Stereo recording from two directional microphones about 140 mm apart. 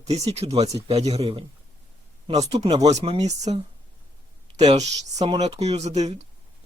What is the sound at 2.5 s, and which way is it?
Speech, 50° right (ahead or behind).